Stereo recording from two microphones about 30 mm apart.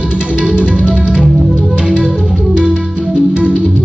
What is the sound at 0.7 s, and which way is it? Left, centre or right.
Music, right.